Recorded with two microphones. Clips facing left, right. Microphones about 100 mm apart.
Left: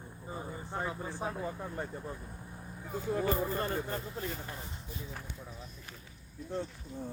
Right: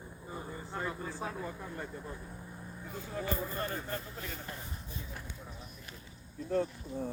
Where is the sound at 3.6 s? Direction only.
30° left (ahead or behind).